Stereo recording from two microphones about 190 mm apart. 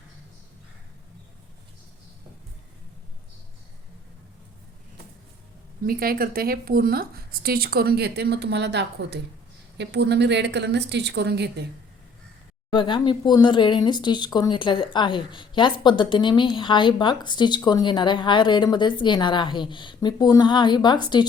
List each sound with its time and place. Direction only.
5.8 s a woman's voice: 50° right (ahead or behind)
12.7 s speech: 25° left (ahead or behind)